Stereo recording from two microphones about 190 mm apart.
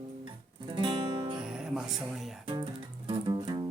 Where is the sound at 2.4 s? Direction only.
25° right (ahead or behind).